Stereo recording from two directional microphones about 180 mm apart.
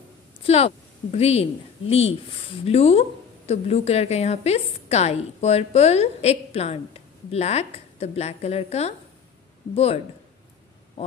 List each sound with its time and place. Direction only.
0.4 s a woman's voice: 35° left (ahead or behind)